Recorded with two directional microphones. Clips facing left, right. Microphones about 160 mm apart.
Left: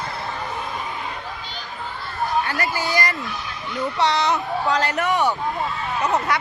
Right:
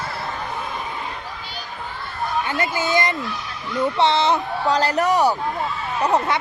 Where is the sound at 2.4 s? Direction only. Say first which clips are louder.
Right 2 dB; 20° right (ahead or behind).